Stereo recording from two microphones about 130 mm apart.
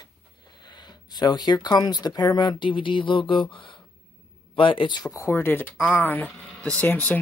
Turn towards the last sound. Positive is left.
turn(degrees=15)  # may be behind; listen again after turning